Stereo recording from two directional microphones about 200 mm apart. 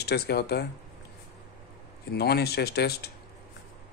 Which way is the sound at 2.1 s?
55° left (ahead or behind).